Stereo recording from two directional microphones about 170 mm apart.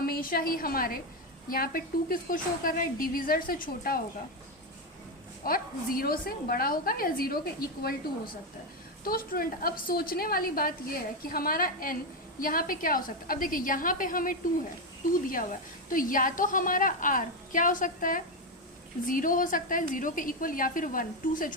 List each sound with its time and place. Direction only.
0.0 s a woman's voice: 60° left (ahead or behind)
5.4 s a woman's voice: 60° left (ahead or behind)
15.9 s a woman's voice: 55° left (ahead or behind)